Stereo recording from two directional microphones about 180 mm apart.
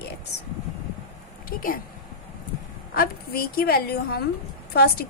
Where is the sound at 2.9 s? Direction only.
55° left (ahead or behind).